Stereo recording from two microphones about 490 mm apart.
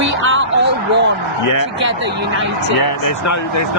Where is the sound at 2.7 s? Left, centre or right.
Left.